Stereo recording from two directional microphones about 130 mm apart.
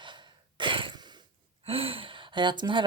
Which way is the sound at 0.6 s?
40° right (ahead or behind).